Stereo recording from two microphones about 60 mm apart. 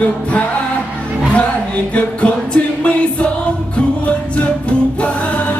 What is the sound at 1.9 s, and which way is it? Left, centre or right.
Music, left.